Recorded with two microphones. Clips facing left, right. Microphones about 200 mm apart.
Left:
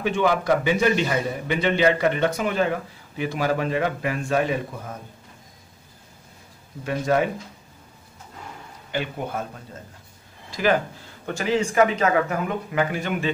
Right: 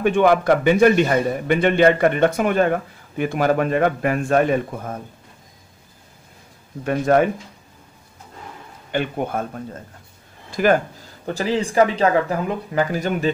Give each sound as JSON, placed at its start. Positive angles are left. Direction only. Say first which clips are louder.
{"t": 0.0, "sound": "a man's voice", "louder": "right 6 dB", "side_deg": -55}
{"t": 6.8, "sound": "a man's voice", "louder": "right 5 dB", "side_deg": -55}
{"t": 8.9, "sound": "a man's voice", "louder": "right 5 dB", "side_deg": -55}
{"t": 10.5, "sound": "speech", "louder": "right 4 dB", "side_deg": -50}
{"t": 11.2, "sound": "speech", "louder": "right 1 dB", "side_deg": -35}